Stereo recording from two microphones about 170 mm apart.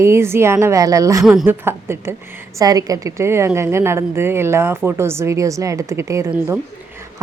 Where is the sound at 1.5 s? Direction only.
15° right (ahead or behind).